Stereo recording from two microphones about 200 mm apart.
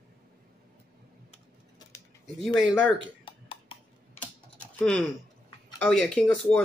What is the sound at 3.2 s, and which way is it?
Burping, 25° left (ahead or behind).